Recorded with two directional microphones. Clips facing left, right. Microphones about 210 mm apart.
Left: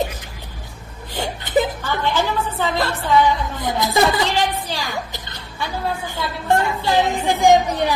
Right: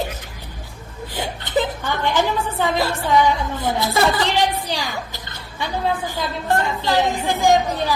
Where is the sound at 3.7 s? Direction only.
15° left (ahead or behind).